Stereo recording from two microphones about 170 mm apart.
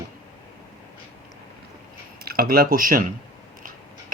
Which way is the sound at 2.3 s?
60° right (ahead or behind).